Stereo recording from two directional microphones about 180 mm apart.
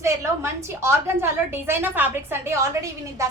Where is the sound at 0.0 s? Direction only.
15° right (ahead or behind).